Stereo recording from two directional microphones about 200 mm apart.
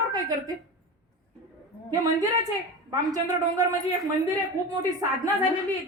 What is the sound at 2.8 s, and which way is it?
Speech, 20° right (ahead or behind).